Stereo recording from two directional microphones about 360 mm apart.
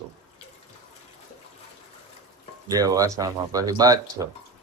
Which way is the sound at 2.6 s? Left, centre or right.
Centre.